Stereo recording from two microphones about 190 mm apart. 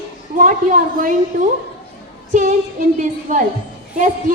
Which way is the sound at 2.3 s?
40° right (ahead or behind).